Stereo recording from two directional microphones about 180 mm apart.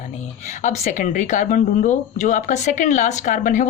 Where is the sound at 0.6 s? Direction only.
45° left (ahead or behind).